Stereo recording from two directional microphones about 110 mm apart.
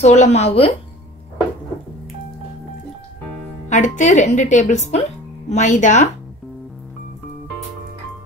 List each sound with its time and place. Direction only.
0.0 s speech: 90° left; by 0.7 s 65° left (ahead or behind)
3.6 s speech: 90° left